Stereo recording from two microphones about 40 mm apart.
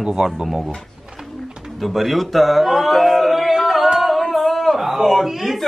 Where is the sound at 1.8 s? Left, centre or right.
Centre.